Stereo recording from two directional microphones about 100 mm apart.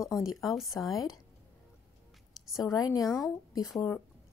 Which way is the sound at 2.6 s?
40° left (ahead or behind).